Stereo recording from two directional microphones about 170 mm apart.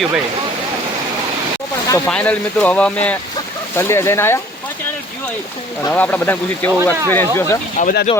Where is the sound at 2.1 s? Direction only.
5° left (ahead or behind).